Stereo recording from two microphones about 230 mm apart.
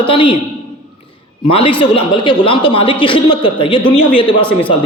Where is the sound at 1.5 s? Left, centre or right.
Left.